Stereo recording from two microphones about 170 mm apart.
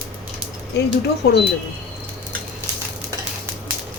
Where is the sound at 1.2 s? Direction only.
80° left.